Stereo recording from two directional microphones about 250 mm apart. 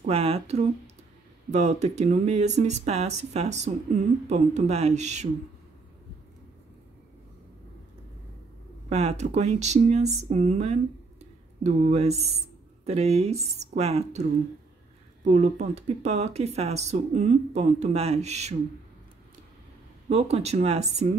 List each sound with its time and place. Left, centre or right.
0.0 s speech: right
8.8 s speech: right
15.2 s speech: right
20.1 s speech: right